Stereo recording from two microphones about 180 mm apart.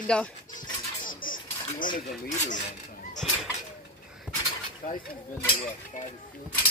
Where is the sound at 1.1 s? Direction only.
50° left (ahead or behind).